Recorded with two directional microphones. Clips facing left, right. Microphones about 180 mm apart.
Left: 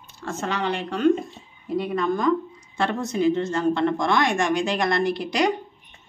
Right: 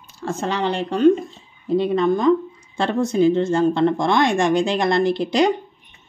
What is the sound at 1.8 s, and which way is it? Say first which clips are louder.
A woman's voice: right 5 dB; 25° right (ahead or behind).